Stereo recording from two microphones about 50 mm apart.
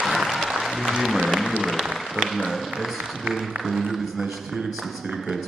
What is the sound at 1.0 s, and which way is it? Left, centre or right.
Speech, centre.